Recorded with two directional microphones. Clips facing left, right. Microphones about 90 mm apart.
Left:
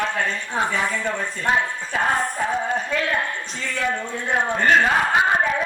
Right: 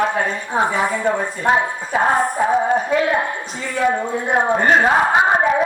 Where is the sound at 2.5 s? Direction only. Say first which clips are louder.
Right 8 dB; 40° right (ahead or behind).